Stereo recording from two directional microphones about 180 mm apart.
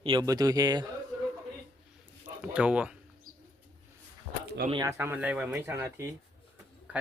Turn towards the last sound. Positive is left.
turn(degrees=-10)  # may be behind; listen again after turning